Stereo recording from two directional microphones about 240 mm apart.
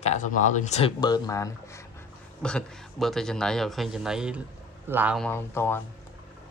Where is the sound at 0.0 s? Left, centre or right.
Left; by 5.8 s centre.